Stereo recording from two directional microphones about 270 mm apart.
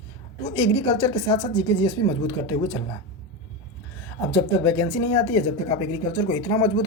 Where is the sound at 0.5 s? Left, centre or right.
Centre.